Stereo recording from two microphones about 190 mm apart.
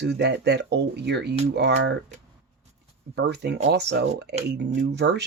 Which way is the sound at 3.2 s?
65° right (ahead or behind).